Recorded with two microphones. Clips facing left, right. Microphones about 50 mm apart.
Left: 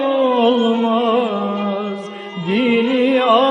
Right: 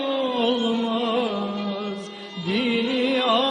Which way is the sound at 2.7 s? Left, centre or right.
Left.